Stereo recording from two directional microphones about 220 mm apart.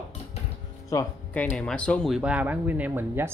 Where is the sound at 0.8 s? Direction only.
10° left (ahead or behind); by 3.2 s 10° right (ahead or behind).